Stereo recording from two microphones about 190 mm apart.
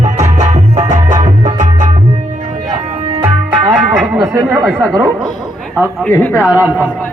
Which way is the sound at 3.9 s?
5° right (ahead or behind).